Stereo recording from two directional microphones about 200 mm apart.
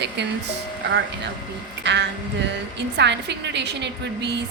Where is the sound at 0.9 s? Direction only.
60° right (ahead or behind).